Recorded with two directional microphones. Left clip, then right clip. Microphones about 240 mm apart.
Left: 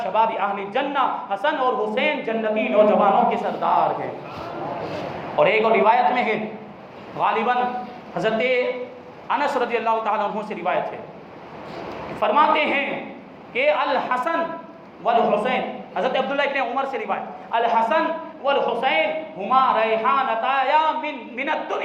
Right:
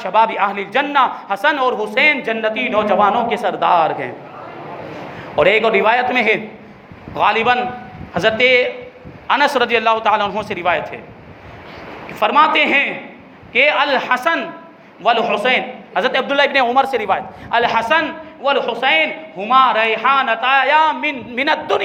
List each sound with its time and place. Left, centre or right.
0.0 s speech: right
5.4 s speech: right
12.2 s speech: right